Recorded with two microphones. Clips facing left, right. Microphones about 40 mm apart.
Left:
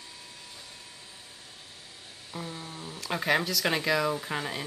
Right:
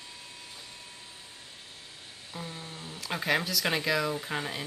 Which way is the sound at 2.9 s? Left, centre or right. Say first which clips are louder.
Left 2 dB; centre.